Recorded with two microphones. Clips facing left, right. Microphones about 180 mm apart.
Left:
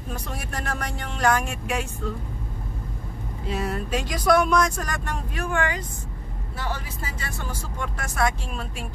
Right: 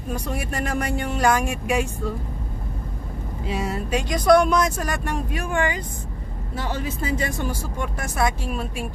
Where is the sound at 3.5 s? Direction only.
5° right (ahead or behind).